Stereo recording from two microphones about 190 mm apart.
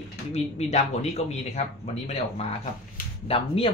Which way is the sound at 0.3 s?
35° left (ahead or behind).